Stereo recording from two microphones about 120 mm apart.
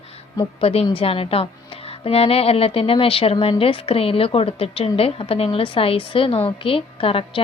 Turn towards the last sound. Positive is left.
turn(degrees=50)  # may be behind; listen again after turning